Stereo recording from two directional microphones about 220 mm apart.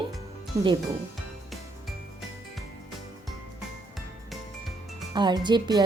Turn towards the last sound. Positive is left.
turn(degrees=-20)  # may be behind; listen again after turning